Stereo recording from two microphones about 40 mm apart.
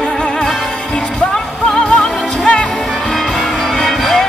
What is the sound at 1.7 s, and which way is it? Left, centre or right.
Music, centre.